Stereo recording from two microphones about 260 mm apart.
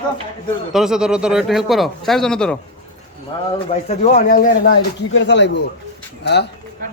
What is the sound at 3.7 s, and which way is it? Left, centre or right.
Speech, left.